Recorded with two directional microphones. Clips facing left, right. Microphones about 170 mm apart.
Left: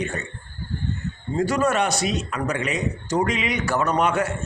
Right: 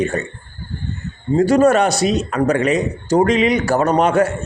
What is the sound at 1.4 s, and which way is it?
A man's voice, 30° right (ahead or behind).